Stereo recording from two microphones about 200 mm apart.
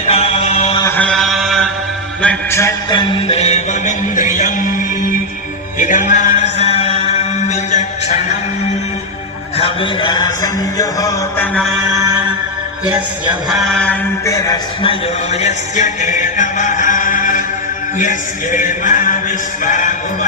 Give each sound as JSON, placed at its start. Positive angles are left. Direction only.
{"t": 0.1, "sound": "music", "side_deg": 30}
{"t": 0.8, "sound": "mantra", "side_deg": 10}
{"t": 2.2, "sound": "a man's voice", "side_deg": 15}
{"t": 5.8, "sound": "a sound", "side_deg": 40}
{"t": 9.6, "sound": "a sound", "side_deg": 25}
{"t": 11.5, "sound": "a man's voice", "side_deg": 0}
{"t": 14.3, "sound": "a man's voice", "side_deg": 15}